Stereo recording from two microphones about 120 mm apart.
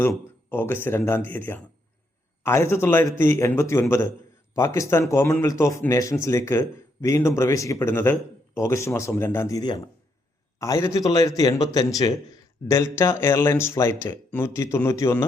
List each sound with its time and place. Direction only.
0.5 s speech: 20° left (ahead or behind)